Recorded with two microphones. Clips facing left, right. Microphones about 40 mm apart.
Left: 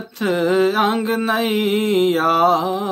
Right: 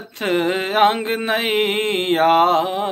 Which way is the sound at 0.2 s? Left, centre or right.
Right.